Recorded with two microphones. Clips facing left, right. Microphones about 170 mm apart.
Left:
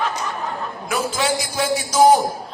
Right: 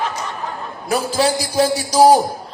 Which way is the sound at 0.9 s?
35° right (ahead or behind).